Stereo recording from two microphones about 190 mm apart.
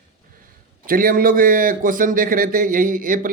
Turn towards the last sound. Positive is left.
turn(degrees=-45)  # may be behind; listen again after turning